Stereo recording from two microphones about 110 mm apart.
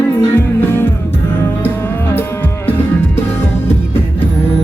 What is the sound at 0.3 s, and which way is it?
Music, 20° left (ahead or behind).